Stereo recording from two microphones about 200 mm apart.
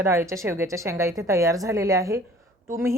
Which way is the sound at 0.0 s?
15° right (ahead or behind).